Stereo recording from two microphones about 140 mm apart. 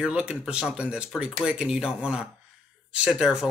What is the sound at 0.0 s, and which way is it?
Speech, 10° right (ahead or behind).